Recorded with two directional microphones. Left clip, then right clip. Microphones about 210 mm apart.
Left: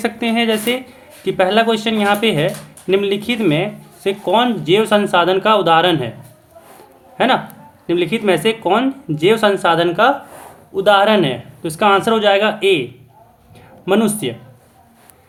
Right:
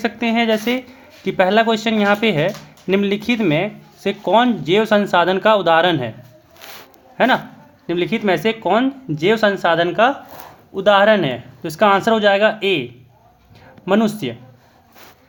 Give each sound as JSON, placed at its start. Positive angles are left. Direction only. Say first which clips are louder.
{"t": 0.0, "sound": "speech", "louder": "left 1 dB", "side_deg": -25}
{"t": 7.2, "sound": "speech", "louder": "left 1 dB", "side_deg": -30}
{"t": 13.8, "sound": "speech", "louder": "left 2 dB", "side_deg": -30}